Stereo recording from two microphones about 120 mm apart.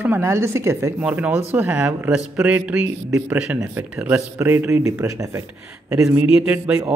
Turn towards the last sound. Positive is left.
turn(degrees=-10)  # may be behind; listen again after turning